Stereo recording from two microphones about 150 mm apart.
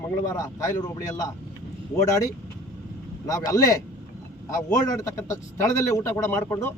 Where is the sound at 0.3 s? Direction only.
25° left (ahead or behind).